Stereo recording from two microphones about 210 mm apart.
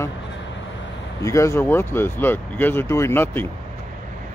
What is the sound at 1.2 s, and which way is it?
Speech, 15° left (ahead or behind).